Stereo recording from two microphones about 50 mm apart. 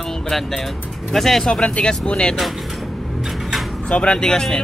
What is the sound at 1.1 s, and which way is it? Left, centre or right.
Speech, centre.